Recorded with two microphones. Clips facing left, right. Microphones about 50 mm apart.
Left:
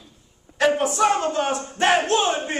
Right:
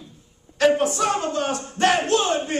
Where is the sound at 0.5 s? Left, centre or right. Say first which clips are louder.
Right 2 dB; centre.